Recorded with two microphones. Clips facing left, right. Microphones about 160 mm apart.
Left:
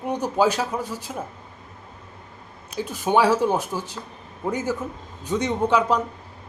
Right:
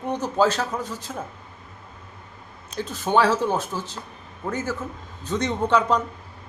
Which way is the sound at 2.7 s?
10° left (ahead or behind).